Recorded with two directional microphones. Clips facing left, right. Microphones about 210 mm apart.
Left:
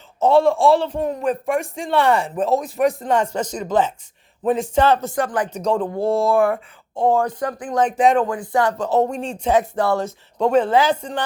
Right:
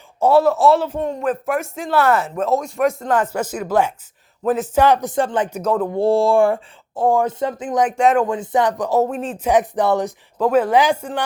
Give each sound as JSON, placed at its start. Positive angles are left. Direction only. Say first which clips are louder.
{"t": 0.2, "sound": "speech", "louder": "right 1 dB", "side_deg": -5}
{"t": 5.2, "sound": "speech", "louder": "right 2 dB", "side_deg": -25}
{"t": 5.5, "sound": "speech", "louder": "right 1 dB", "side_deg": -5}
{"t": 6.0, "sound": "speech", "louder": "right 4 dB", "side_deg": -30}
{"t": 6.9, "sound": "speech", "louder": "right 1 dB", "side_deg": -5}
{"t": 7.2, "sound": "speech", "louder": "right 2 dB", "side_deg": -25}
{"t": 7.9, "sound": "speech", "louder": "even", "side_deg": -5}
{"t": 8.3, "sound": "speech", "louder": "right 2 dB", "side_deg": -20}
{"t": 9.5, "sound": "speech", "louder": "right 2 dB", "side_deg": -20}
{"t": 10.4, "sound": "speech", "louder": "right 1 dB", "side_deg": -5}